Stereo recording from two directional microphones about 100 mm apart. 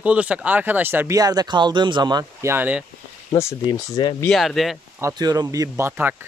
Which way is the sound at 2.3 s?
25° right (ahead or behind).